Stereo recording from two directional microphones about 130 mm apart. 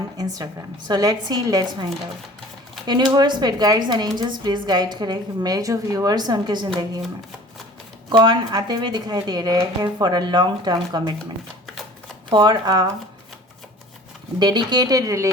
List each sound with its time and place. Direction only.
0.2 s a woman's voice: 30° right (ahead or behind)
8.1 s a woman's voice: 35° right (ahead or behind)
12.3 s a woman's voice: 35° right (ahead or behind)
14.3 s speech: 35° right (ahead or behind)